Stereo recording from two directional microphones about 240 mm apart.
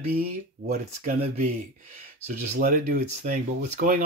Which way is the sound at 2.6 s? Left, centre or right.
Right.